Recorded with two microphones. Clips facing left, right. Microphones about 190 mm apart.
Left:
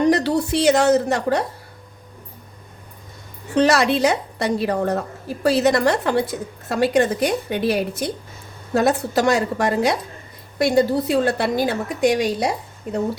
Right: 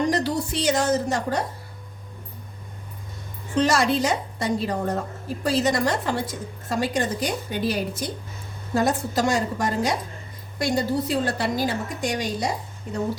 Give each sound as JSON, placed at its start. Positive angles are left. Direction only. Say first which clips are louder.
{"t": 0.1, "sound": "a woman's voice", "louder": "left 6 dB", "side_deg": 65}
{"t": 3.5, "sound": "a woman's voice", "louder": "left 4 dB", "side_deg": 70}